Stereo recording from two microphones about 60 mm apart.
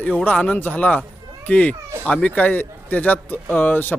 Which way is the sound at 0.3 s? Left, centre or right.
Left.